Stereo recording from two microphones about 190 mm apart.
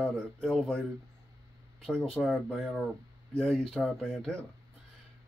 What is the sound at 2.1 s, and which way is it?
Speech, centre (ahead or behind).